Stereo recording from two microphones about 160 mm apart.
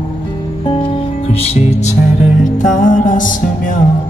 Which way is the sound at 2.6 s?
55° left (ahead or behind).